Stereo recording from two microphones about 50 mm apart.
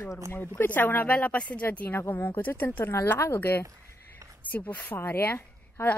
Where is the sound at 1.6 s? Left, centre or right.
Left.